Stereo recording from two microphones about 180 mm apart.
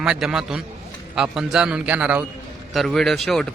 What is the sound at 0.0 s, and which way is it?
A man's voice, 5° right (ahead or behind).